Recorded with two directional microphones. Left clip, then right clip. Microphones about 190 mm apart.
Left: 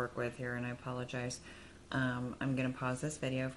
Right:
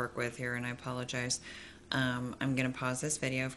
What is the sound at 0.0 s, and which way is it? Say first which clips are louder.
Speech: right 2 dB; 15° right (ahead or behind).